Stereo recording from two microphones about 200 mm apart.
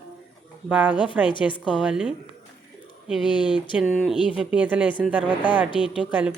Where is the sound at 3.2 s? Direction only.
25° left (ahead or behind).